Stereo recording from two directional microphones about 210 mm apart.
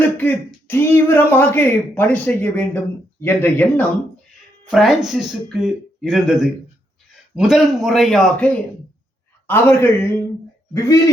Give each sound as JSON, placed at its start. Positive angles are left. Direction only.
{"t": 0.0, "sound": "speech", "side_deg": 10}
{"t": 4.7, "sound": "a man's voice", "side_deg": 0}
{"t": 7.3, "sound": "a man's voice", "side_deg": 0}